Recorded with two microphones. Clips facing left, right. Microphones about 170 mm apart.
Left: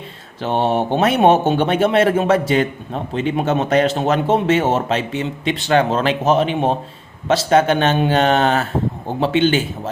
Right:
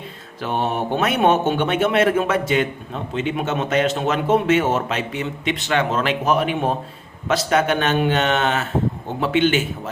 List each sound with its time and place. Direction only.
0.3 s speech: 30° left (ahead or behind)